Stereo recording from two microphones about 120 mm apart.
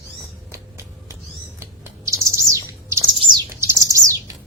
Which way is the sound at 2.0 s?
25° right (ahead or behind).